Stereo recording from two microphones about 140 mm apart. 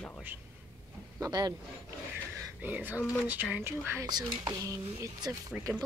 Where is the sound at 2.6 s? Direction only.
10° right (ahead or behind); by 5.4 s 30° right (ahead or behind).